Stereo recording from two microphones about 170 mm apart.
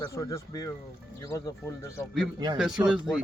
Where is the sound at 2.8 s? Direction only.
15° right (ahead or behind).